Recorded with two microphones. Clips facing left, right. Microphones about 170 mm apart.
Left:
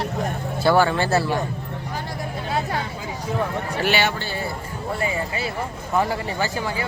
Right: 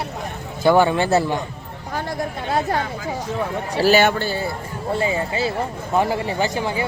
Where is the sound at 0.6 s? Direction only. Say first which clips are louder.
Right 3 dB; 15° right (ahead or behind).